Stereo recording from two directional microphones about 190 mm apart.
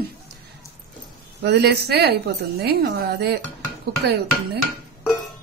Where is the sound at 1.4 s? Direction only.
60° right (ahead or behind).